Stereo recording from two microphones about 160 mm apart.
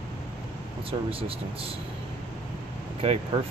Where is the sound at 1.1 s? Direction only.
35° right (ahead or behind).